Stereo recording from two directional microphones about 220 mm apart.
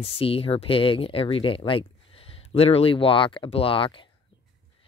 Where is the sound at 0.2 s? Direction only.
25° left (ahead or behind).